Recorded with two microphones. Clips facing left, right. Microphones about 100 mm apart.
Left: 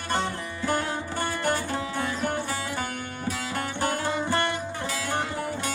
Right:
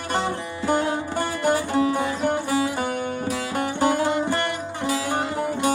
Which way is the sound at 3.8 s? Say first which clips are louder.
Right 7 dB; 15° right (ahead or behind).